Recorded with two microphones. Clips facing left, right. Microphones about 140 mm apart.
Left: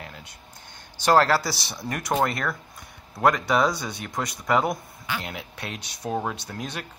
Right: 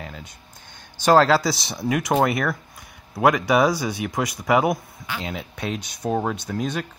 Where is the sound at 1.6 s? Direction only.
Centre (ahead or behind).